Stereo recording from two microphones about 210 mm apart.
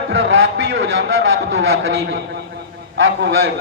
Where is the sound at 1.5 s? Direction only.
60° right (ahead or behind).